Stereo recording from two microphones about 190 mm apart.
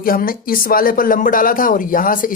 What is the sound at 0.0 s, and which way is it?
Speech, 50° left (ahead or behind).